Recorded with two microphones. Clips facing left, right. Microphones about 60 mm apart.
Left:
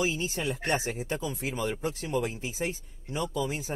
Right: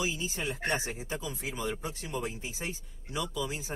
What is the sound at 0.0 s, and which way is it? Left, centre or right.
Speech, left.